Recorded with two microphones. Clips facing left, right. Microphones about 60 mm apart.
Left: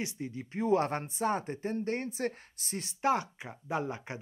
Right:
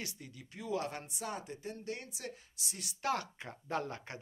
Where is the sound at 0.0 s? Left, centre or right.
Left.